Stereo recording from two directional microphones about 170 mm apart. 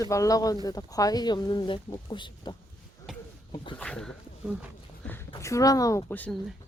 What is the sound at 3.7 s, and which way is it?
Speech, 5° left (ahead or behind).